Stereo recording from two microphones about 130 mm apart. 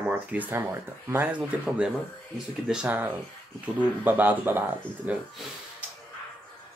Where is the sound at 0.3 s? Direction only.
15° right (ahead or behind).